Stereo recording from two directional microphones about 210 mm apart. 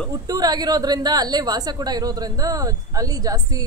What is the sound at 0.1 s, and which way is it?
Speech, 20° right (ahead or behind).